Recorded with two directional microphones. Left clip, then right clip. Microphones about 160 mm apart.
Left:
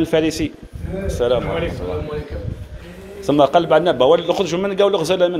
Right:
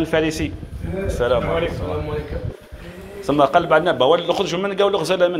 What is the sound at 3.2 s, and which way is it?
A man's voice, 90° left.